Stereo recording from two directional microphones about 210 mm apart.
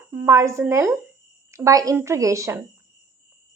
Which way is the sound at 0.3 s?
15° right (ahead or behind).